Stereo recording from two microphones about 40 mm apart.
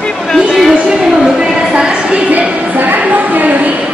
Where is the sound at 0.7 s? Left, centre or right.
Right.